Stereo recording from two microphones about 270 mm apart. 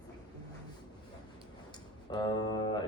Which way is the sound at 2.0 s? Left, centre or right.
Centre.